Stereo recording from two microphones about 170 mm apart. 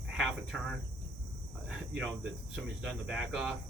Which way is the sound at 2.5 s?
5° right (ahead or behind).